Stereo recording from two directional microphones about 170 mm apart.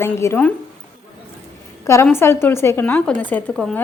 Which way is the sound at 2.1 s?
15° left (ahead or behind).